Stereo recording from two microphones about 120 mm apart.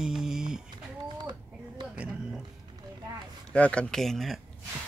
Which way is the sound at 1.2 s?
35° right (ahead or behind).